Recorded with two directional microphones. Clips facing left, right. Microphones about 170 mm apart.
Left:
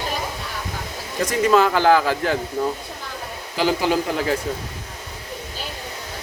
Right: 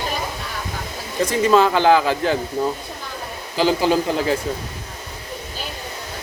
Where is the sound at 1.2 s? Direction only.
30° right (ahead or behind).